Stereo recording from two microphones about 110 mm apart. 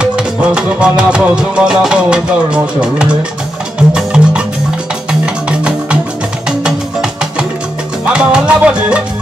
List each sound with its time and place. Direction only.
0.0 s music: 10° right (ahead or behind)